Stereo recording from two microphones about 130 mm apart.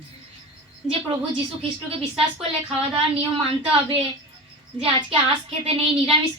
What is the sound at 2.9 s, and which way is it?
A man's voice, 45° right (ahead or behind).